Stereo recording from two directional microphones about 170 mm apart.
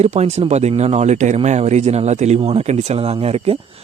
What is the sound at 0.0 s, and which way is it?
Speech, 40° right (ahead or behind).